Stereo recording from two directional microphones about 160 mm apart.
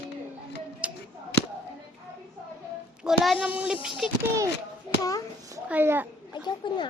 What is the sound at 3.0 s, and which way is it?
A child's voice, centre (ahead or behind).